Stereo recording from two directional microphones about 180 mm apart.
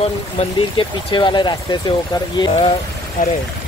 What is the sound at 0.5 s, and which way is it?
Speech, 30° left (ahead or behind).